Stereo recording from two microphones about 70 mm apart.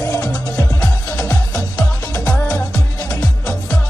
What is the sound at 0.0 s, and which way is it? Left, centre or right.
Music, left.